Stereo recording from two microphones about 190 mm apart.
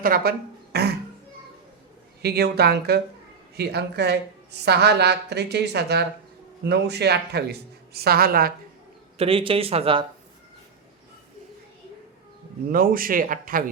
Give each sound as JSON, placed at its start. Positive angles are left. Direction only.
{"t": 0.0, "sound": "speech", "side_deg": -55}
{"t": 2.2, "sound": "a woman's voice", "side_deg": -55}
{"t": 9.1, "sound": "speech", "side_deg": -30}
{"t": 12.7, "sound": "a man's voice", "side_deg": -50}